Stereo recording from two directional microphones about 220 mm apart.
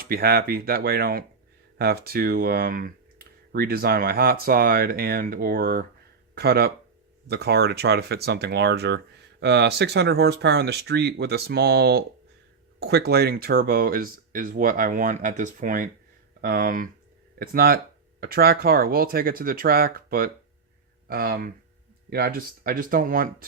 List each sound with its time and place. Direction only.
0.0 s speech: 45° right (ahead or behind)